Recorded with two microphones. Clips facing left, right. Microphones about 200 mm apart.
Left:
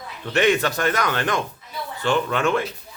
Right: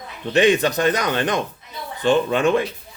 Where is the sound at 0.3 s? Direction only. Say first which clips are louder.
Right 3 dB; 20° right (ahead or behind).